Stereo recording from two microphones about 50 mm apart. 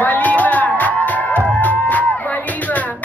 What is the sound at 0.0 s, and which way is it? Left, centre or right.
Music, left.